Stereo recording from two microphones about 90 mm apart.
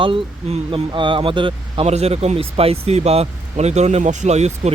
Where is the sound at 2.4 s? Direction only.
90° right.